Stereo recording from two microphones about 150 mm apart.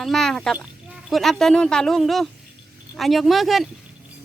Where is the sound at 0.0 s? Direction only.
Centre (ahead or behind).